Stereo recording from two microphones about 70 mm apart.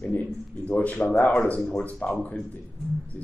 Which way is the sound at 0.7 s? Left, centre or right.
Left.